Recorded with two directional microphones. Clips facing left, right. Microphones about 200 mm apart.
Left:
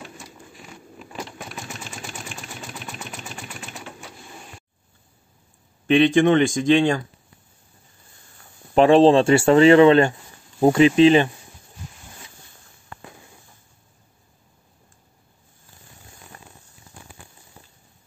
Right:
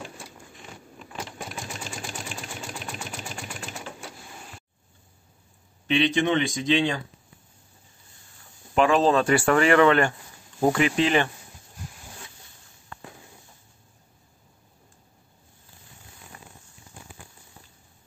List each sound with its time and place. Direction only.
5.9 s speech: 50° left (ahead or behind)
8.7 s speech: 30° left (ahead or behind)
16.3 s a sound: 40° left (ahead or behind)